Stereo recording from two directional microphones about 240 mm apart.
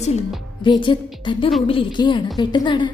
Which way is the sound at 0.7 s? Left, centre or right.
Centre.